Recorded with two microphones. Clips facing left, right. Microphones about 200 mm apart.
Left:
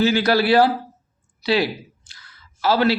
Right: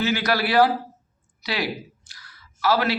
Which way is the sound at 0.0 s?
30° left (ahead or behind).